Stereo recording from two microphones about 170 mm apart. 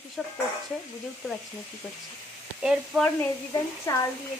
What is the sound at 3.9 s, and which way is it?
Speech, 20° left (ahead or behind).